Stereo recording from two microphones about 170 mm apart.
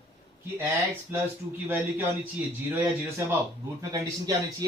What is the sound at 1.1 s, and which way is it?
Speech, 15° right (ahead or behind).